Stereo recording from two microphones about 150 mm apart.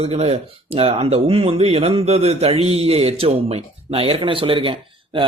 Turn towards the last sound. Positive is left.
turn(degrees=-35)  # may be behind; listen again after turning